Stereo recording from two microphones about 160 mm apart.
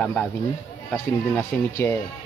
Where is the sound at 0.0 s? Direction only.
10° left (ahead or behind).